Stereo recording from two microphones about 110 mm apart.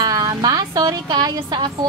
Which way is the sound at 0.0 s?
35° right (ahead or behind).